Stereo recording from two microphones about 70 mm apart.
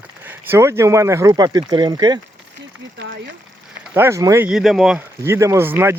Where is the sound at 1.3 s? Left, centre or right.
Right.